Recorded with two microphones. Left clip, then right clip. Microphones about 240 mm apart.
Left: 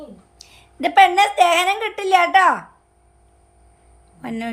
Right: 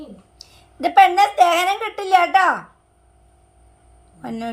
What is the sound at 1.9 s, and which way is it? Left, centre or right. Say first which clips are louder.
Speech: even; centre.